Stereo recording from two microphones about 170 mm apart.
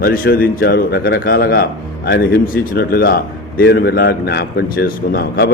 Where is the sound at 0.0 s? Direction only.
65° left (ahead or behind).